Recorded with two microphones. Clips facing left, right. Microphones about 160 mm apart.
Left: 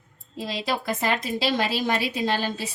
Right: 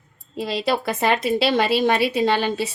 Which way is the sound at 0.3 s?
70° right (ahead or behind).